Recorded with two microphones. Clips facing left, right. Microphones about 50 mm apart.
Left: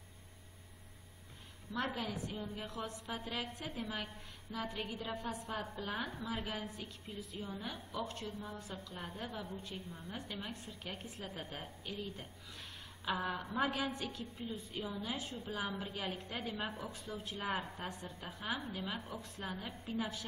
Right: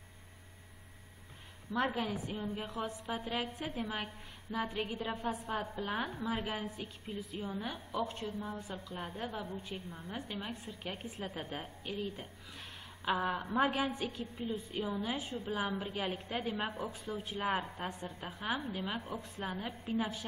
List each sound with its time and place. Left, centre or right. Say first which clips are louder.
1.7 s a woman's voice: right 5 dB; centre
2.7 s a woman's voice: right 4 dB; centre